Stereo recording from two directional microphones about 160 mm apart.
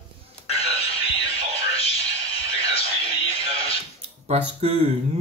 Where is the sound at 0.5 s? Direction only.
40° left (ahead or behind).